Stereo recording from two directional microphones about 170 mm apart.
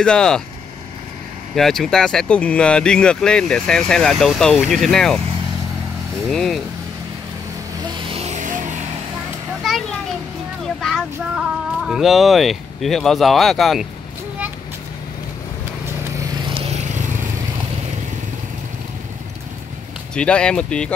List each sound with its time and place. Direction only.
0.0 s speech: 5° left (ahead or behind)
1.5 s speech: centre (ahead or behind)
6.2 s speech: centre (ahead or behind)
8.1 s music: 40° right (ahead or behind)
9.6 s children playing: centre (ahead or behind)
10.8 s speech: centre (ahead or behind)
16.4 s vehicle: 35° right (ahead or behind)
20.2 s speech: 5° left (ahead or behind)